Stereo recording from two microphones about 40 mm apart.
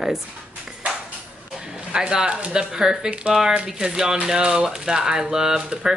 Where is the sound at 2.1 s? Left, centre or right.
Right.